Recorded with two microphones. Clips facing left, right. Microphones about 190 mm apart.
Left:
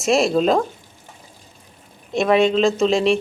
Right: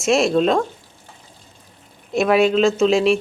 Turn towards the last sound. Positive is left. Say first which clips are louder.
# right 1 dB
turn(degrees=0)  # may be behind; listen again after turning